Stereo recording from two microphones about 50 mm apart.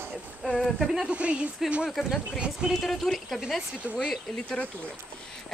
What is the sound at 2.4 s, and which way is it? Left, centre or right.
Speech, centre.